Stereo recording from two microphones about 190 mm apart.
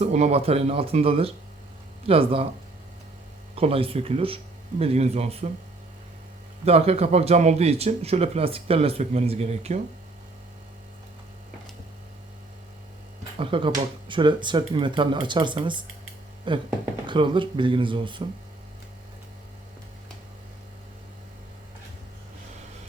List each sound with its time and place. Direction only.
0.0 s speech: 35° right (ahead or behind)
3.5 s speech: 30° right (ahead or behind)
6.7 s speech: 35° right (ahead or behind)
13.4 s speech: 25° right (ahead or behind)